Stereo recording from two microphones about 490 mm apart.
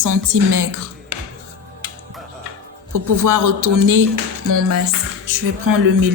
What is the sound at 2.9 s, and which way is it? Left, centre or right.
A woman's voice, right.